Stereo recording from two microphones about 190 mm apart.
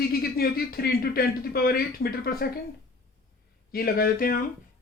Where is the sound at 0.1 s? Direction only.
55° left (ahead or behind).